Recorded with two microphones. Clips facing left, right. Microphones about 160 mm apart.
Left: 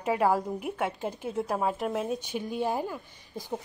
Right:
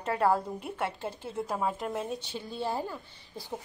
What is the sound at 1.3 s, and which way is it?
Speech, centre (ahead or behind).